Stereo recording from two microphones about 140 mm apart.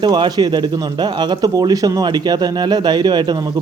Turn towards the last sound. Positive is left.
turn(degrees=-30)  # may be behind; listen again after turning